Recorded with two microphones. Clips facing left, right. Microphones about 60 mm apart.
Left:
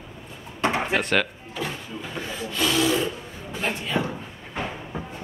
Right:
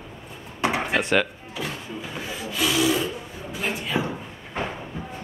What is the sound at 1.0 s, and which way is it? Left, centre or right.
Speech, centre.